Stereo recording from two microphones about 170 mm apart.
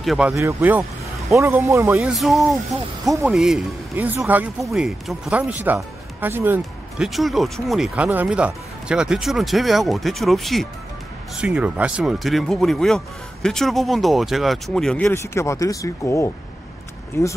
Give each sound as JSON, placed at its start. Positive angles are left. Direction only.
{"t": 0.0, "sound": "speech", "side_deg": 0}
{"t": 0.3, "sound": "speech", "side_deg": -15}
{"t": 2.0, "sound": "speech", "side_deg": 0}
{"t": 7.1, "sound": "speech", "side_deg": 0}